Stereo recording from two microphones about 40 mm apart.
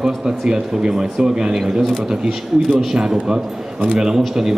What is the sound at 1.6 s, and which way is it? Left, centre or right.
Speech, centre.